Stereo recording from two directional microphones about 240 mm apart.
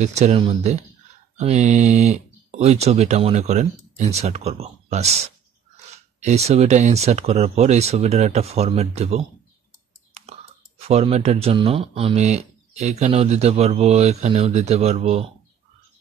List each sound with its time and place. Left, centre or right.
0.0 s speech: right
10.8 s speech: right